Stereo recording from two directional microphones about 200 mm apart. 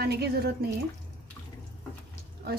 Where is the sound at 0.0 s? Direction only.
55° right (ahead or behind).